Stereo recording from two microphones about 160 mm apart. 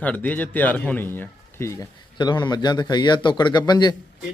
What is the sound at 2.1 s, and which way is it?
A man's voice, 25° left (ahead or behind).